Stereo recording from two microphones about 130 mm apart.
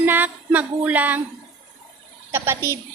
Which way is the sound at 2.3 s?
20° right (ahead or behind).